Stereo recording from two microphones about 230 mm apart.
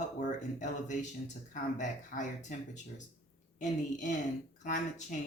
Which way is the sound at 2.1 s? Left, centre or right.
Left.